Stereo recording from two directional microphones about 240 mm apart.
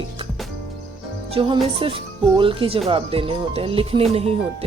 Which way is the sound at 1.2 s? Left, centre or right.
Right.